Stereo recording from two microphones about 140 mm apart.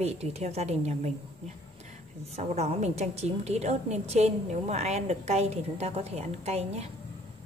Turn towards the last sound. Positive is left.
turn(degrees=-50)  # may be behind; listen again after turning